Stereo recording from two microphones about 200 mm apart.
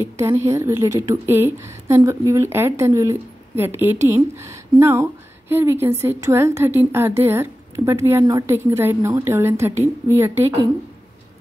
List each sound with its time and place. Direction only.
0.0 s a woman's voice: 15° right (ahead or behind)